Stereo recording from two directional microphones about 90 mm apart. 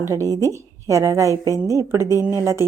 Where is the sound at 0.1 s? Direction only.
35° right (ahead or behind).